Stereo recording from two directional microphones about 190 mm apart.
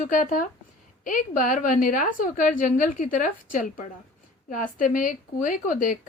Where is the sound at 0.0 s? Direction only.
45° left (ahead or behind).